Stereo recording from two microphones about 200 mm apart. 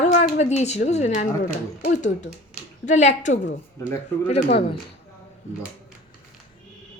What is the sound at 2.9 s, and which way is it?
Speech, 35° left (ahead or behind).